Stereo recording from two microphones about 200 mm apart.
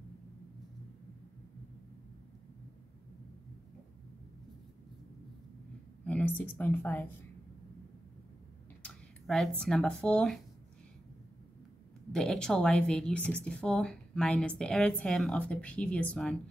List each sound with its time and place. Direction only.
6.0 s speech: 5° left (ahead or behind)
8.8 s a sound: centre (ahead or behind)
9.6 s speech: 5° left (ahead or behind)
12.1 s speech: 5° left (ahead or behind)